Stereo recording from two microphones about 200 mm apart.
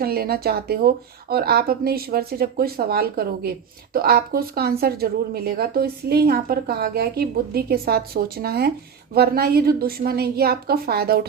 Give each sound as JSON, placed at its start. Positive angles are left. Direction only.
{"t": 0.0, "sound": "speech", "side_deg": -50}